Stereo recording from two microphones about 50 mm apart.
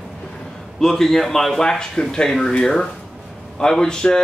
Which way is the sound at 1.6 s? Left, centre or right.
Centre.